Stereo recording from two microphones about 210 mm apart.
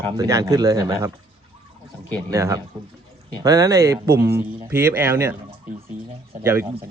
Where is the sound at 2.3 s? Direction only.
15° right (ahead or behind).